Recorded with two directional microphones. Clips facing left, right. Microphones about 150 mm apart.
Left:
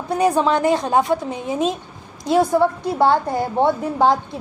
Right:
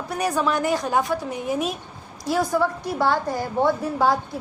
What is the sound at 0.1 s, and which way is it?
A woman's voice, 25° left (ahead or behind).